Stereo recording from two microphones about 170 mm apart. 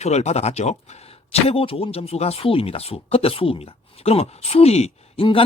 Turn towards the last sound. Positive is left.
turn(degrees=35)  # may be behind; listen again after turning